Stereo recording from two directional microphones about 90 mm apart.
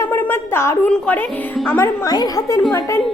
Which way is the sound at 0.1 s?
25° left (ahead or behind).